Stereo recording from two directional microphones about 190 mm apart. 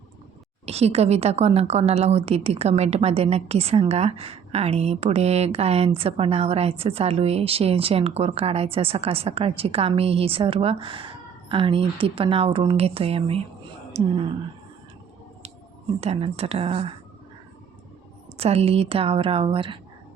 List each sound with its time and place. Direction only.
0.6 s a woman's voice: 35° right (ahead or behind)
16.0 s a woman's voice: 35° right (ahead or behind)
18.3 s a woman's voice: 30° right (ahead or behind)